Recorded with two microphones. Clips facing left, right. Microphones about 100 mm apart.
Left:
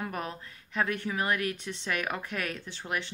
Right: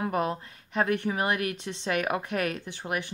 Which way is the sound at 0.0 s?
20° right (ahead or behind).